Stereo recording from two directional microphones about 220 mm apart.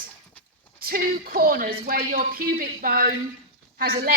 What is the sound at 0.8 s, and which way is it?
A woman's voice, 45° right (ahead or behind).